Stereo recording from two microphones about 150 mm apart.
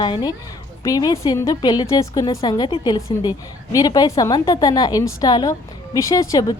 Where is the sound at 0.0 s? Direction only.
30° left (ahead or behind).